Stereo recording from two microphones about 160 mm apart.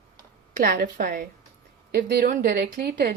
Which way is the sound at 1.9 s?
90° right.